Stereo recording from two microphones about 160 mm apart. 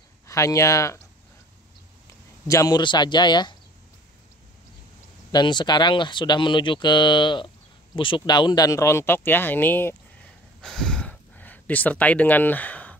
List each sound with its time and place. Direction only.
0.3 s speech: 20° left (ahead or behind)
2.4 s speech: 20° left (ahead or behind)
5.3 s speech: 25° left (ahead or behind); by 9.9 s 10° left (ahead or behind)
10.6 s a sound: 5° left (ahead or behind)